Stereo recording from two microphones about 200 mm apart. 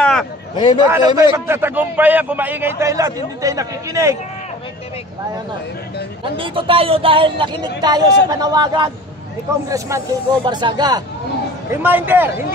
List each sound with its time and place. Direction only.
0.0 s a sound: centre (ahead or behind)
0.8 s a man's voice: 15° right (ahead or behind)
6.2 s a man's voice: 25° right (ahead or behind)
11.7 s a man's voice: 10° right (ahead or behind)